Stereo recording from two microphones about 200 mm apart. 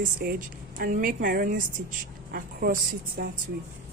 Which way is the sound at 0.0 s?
45° right (ahead or behind).